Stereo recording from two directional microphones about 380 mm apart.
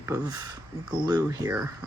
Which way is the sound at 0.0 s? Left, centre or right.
Centre.